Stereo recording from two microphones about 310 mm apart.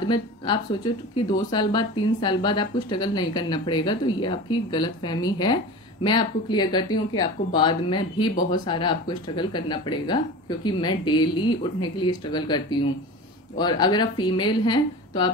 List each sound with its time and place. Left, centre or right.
1.4 s speech: centre